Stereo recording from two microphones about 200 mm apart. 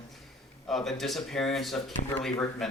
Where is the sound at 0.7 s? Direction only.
Centre (ahead or behind).